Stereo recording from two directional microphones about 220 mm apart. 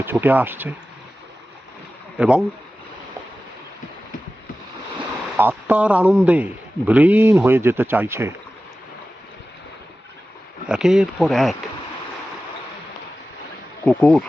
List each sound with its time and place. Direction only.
0.0 s a man's voice: 10° right (ahead or behind)
2.1 s speech: 5° right (ahead or behind)
5.4 s a man's voice: 5° right (ahead or behind)
10.7 s speech: centre (ahead or behind)
13.8 s speech: 5° left (ahead or behind)